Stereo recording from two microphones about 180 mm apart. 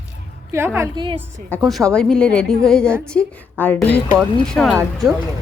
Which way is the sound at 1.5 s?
10° left (ahead or behind).